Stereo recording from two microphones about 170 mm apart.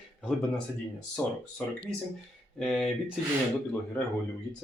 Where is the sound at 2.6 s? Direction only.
Centre (ahead or behind).